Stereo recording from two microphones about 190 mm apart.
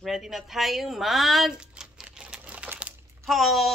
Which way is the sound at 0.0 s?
Centre (ahead or behind).